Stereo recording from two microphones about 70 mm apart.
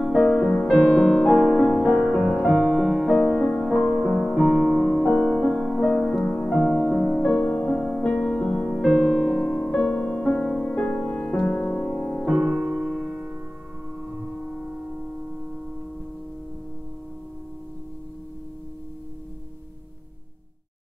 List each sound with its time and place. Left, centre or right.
0.0 s music: centre
8.8 s music: centre
12.3 s music: centre
14.2 s singing bowl: centre